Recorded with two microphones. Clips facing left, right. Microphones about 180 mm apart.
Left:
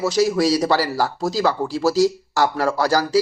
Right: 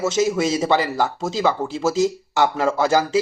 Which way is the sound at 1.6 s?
20° right (ahead or behind).